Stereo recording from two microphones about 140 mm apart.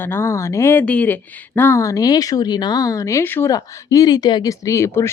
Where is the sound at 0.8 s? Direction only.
10° left (ahead or behind).